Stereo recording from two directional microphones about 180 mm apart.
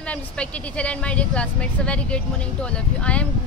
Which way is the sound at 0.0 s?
5° left (ahead or behind).